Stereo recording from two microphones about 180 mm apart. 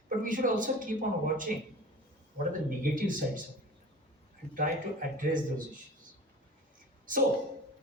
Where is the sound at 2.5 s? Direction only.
50° right (ahead or behind).